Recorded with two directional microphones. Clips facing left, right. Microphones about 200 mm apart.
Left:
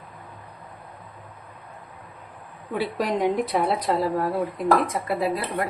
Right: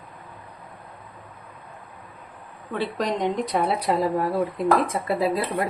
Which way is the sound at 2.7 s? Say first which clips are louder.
Left 1 dB; 5° left (ahead or behind).